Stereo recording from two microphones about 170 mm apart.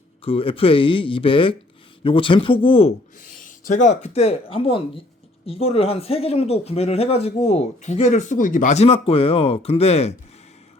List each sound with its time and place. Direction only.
0.3 s speech: 35° left (ahead or behind)
3.2 s speech: 50° left (ahead or behind)